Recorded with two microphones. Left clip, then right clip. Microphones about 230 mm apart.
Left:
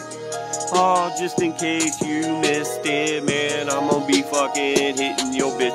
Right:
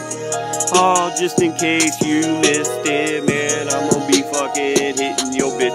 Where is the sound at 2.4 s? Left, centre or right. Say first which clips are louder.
Right 4 dB; centre.